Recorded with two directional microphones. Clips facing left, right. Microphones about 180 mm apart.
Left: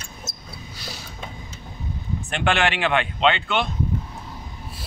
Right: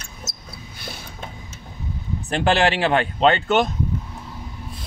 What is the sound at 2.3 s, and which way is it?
Speech, 35° right (ahead or behind).